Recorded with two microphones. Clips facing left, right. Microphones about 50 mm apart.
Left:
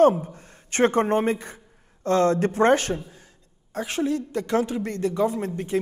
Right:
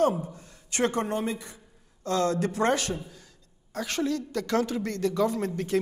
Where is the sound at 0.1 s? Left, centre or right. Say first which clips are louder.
Left 3 dB; left.